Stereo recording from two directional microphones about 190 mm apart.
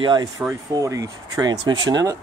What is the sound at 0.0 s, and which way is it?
Speech, 25° right (ahead or behind).